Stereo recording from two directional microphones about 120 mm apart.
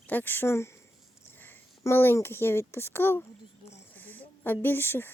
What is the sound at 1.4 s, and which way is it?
Speech, 20° left (ahead or behind).